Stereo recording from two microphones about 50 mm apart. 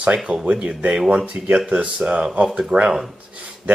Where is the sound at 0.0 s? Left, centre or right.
Centre.